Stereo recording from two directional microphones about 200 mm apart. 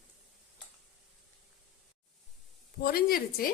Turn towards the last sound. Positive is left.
turn(degrees=45)  # may be behind; listen again after turning